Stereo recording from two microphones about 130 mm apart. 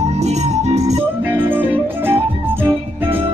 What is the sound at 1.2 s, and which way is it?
Music, 15° right (ahead or behind).